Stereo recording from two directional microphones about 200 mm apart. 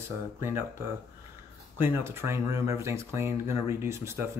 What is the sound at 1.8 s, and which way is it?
Speech, 10° right (ahead or behind).